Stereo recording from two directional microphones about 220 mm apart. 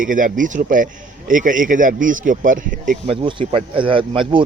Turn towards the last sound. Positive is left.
turn(degrees=-25)  # may be behind; listen again after turning